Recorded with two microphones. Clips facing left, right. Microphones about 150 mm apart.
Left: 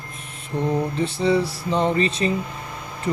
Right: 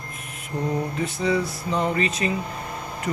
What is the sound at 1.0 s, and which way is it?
Speech, 30° left (ahead or behind).